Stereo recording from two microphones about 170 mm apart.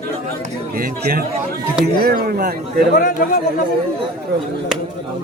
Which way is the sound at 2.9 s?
55° left (ahead or behind).